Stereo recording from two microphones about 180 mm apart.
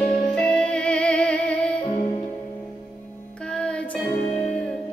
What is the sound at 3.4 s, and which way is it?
Music, 5° left (ahead or behind).